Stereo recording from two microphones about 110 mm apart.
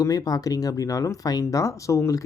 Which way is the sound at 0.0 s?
35° left (ahead or behind).